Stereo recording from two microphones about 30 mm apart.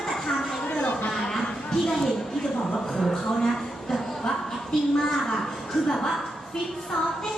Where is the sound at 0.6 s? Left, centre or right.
Left.